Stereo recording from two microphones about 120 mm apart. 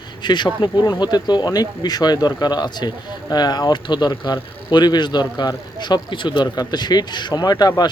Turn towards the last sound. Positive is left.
turn(degrees=35)  # may be behind; listen again after turning